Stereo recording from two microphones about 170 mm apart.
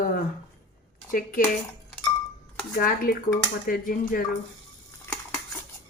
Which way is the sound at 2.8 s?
60° left (ahead or behind).